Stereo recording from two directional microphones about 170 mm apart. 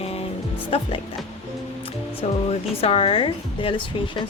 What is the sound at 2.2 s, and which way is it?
Speech, 40° left (ahead or behind).